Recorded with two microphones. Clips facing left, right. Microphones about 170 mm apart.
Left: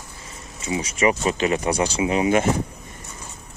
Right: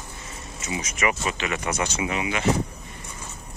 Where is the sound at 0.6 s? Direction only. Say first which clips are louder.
Left 6 dB; 30° left (ahead or behind).